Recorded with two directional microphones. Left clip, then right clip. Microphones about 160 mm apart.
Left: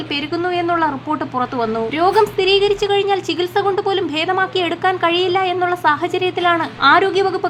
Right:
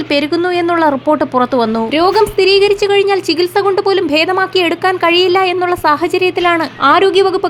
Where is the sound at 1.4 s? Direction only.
30° right (ahead or behind).